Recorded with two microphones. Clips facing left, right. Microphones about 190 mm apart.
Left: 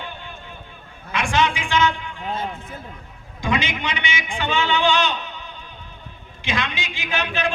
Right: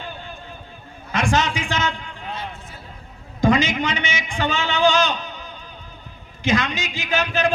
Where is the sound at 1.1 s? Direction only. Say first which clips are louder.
Even; 40° right (ahead or behind).